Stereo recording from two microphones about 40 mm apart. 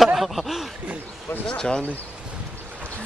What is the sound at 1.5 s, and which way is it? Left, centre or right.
Speech, left.